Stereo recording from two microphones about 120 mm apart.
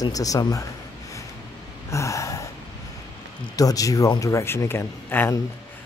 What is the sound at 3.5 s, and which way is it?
Speech, 30° left (ahead or behind).